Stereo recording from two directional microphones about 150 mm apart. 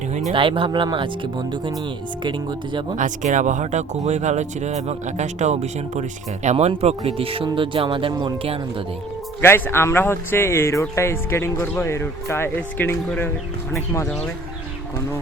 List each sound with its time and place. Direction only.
0.3 s speech: 35° right (ahead or behind)
2.9 s speech: 55° right (ahead or behind); by 8.5 s 35° right (ahead or behind)
9.4 s speech: 15° left (ahead or behind)